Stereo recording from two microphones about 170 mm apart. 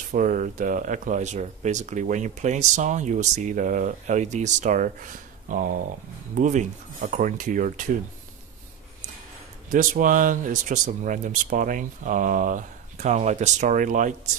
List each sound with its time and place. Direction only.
0.1 s speech: 50° right (ahead or behind)
9.7 s speech: 55° right (ahead or behind)